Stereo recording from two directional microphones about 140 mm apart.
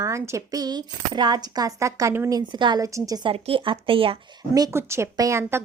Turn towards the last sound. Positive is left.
turn(degrees=-15)  # may be behind; listen again after turning